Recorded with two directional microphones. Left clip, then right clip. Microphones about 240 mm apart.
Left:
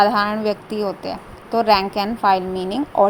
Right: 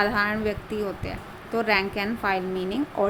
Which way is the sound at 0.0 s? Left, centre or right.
Centre.